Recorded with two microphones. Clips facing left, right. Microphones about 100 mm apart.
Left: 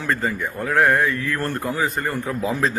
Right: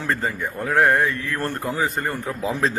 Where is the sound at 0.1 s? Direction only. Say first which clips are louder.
Left 2 dB; 20° right (ahead or behind).